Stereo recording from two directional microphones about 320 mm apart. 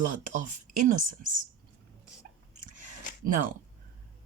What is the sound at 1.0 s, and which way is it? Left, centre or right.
Speech, right.